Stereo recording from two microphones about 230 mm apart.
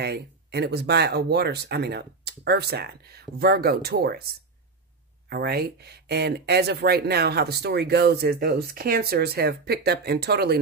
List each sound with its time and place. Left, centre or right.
0.0 s speech: right
5.3 s speech: right